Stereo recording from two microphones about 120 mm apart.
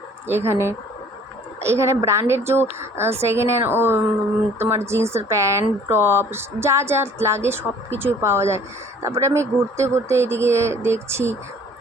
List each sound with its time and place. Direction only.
0.3 s speech: 20° right (ahead or behind)